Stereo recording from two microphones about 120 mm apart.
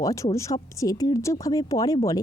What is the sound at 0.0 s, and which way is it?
Speech, 30° left (ahead or behind).